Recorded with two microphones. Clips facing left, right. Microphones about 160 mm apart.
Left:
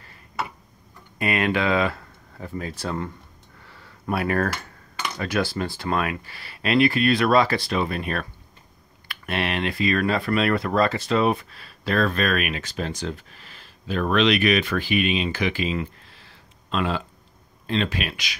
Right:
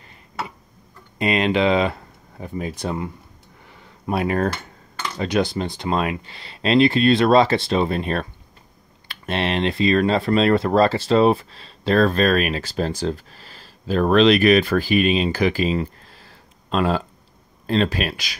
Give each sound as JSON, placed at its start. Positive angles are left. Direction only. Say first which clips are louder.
{"t": 1.1, "sound": "speech", "louder": "right 4 dB", "side_deg": -20}
{"t": 3.6, "sound": "a sound", "louder": "right 2 dB", "side_deg": -20}
{"t": 5.1, "sound": "speech", "louder": "right 4 dB", "side_deg": -20}